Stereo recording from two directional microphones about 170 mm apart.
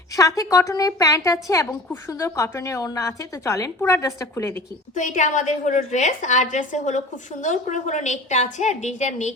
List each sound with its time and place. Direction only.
0.1 s a woman's voice: 20° left (ahead or behind)
4.9 s a woman's voice: 45° left (ahead or behind)